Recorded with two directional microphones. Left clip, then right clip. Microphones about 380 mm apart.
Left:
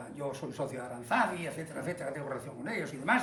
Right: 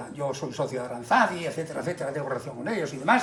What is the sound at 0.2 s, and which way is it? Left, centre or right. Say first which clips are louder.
Speech: right 7 dB; centre.